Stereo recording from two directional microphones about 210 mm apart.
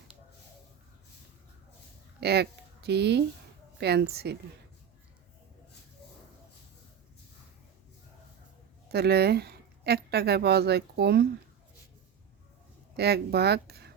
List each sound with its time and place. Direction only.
2.2 s speech: 50° right (ahead or behind)
8.9 s speech: 50° right (ahead or behind)
13.0 s speech: 50° right (ahead or behind)